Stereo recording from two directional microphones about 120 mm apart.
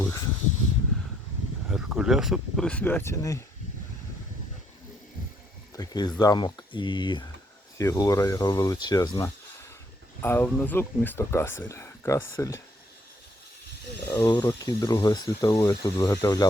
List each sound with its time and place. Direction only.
1.7 s speech: 5° right (ahead or behind)
2.6 s speech: 15° left (ahead or behind)
5.7 s speech: 30° left (ahead or behind)
7.8 s speech: 30° left (ahead or behind)
10.2 s speech: 15° left (ahead or behind)
14.0 s speech: 25° left (ahead or behind)